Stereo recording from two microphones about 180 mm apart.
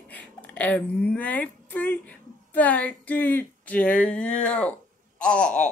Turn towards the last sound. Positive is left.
turn(degrees=5)  # may be behind; listen again after turning